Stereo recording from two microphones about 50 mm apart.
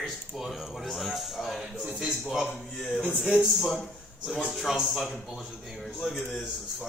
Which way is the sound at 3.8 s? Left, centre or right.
Centre.